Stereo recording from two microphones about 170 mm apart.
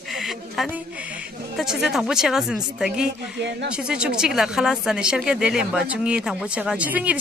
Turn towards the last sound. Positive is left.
turn(degrees=-10)  # may be behind; listen again after turning